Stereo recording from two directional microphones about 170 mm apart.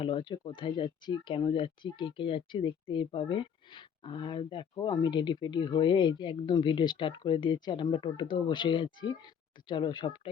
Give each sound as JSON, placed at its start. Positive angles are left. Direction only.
{"t": 0.0, "sound": "speech", "side_deg": 30}